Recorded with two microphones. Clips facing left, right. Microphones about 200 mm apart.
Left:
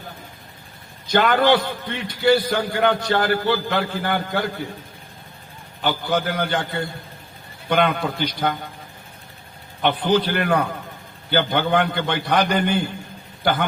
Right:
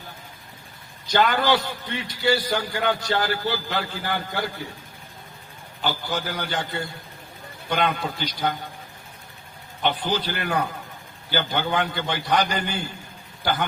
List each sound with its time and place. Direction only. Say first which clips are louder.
1.0 s a man's voice: left 4 dB; 55° left (ahead or behind)
5.8 s a man's voice: left 5 dB; 55° left (ahead or behind)
9.8 s a man's voice: left 6 dB; 55° left (ahead or behind)